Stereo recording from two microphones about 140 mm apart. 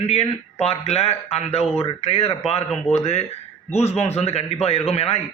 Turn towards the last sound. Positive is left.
turn(degrees=45)  # may be behind; listen again after turning